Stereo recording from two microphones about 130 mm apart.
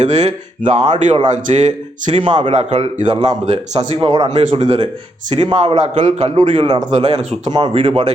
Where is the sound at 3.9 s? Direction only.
35° right (ahead or behind).